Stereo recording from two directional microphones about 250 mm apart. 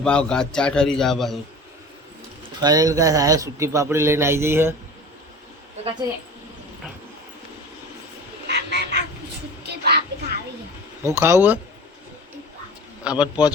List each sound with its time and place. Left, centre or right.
0.0 s a man's voice: centre
2.6 s a man's voice: centre
8.4 s duck: right
9.6 s a sound: right
11.0 s a man's voice: centre
13.1 s a man's voice: centre